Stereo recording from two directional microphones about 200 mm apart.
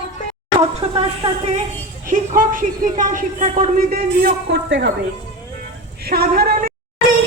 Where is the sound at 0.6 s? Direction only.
30° right (ahead or behind).